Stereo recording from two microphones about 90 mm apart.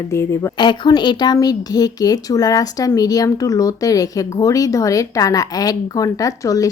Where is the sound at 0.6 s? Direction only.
55° left (ahead or behind).